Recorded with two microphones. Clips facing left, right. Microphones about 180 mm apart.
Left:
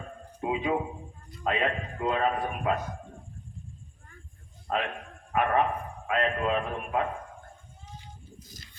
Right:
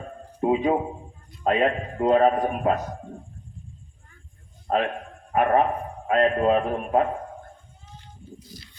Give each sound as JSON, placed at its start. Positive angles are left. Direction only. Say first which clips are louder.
{"t": 0.4, "sound": "a man's voice", "louder": "right 7 dB", "side_deg": -40}
{"t": 4.7, "sound": "a man's voice", "louder": "right 7 dB", "side_deg": -40}
{"t": 8.4, "sound": "a sound", "louder": "right 5 dB", "side_deg": 45}